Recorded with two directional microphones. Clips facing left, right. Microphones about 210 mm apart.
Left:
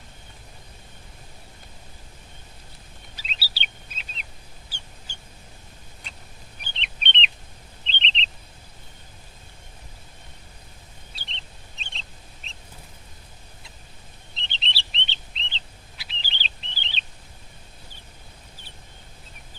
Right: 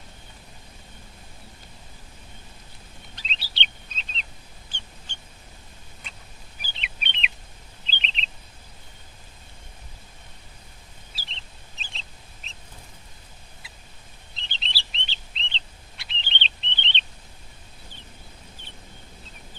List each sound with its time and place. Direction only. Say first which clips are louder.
3.2 s chirp: right 1 dB; 5° left (ahead or behind)
4.7 s a sound: right 2 dB; 10° left (ahead or behind)
6.6 s bird: even; 5° right (ahead or behind)
11.1 s bird: left 1 dB; 5° right (ahead or behind)
14.3 s chirp: left 2 dB; centre (ahead or behind)